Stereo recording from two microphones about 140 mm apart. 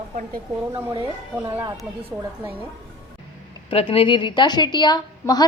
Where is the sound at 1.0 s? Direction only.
15° right (ahead or behind).